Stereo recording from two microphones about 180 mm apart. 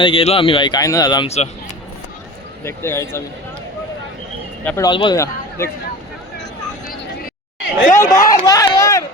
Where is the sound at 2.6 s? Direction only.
15° left (ahead or behind).